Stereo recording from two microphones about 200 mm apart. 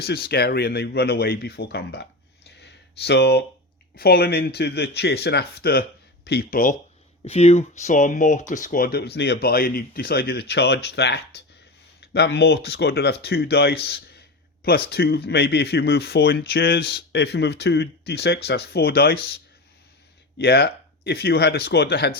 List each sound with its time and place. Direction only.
0.0 s speech: 55° left (ahead or behind)
2.6 s a sound: 55° left (ahead or behind)
3.9 s speech: 50° left (ahead or behind)
7.3 s speech: 30° left (ahead or behind); by 19.4 s 50° left (ahead or behind)
20.4 s speech: 50° left (ahead or behind)